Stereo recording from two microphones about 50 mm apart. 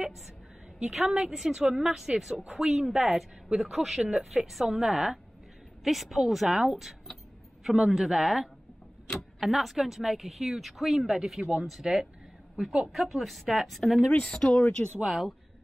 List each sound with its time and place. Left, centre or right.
0.9 s a woman's voice: centre
12.9 s a woman's voice: centre
14.2 s speech: centre
15.0 s a woman's voice: centre